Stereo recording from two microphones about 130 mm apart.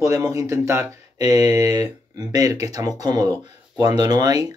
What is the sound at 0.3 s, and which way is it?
Speech, 25° right (ahead or behind).